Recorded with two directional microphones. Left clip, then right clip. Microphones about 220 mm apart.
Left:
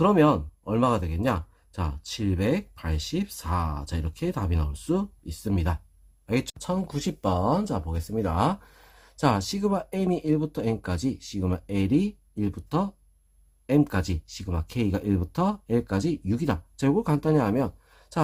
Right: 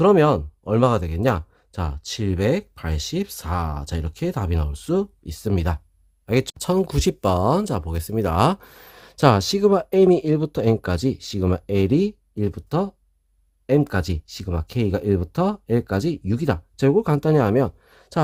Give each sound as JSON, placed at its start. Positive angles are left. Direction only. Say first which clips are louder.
{"t": 0.0, "sound": "speech", "louder": "right 5 dB", "side_deg": -40}